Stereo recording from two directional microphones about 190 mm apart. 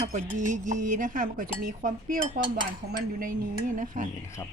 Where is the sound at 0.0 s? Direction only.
40° right (ahead or behind).